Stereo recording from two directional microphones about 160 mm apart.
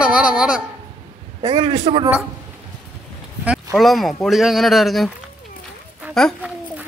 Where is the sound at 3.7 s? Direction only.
Centre (ahead or behind).